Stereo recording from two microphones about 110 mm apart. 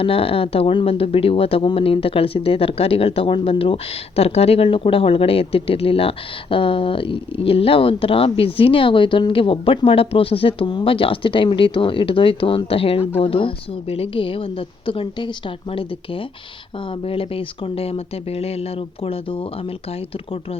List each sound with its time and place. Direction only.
0.0 s speech: 60° left (ahead or behind)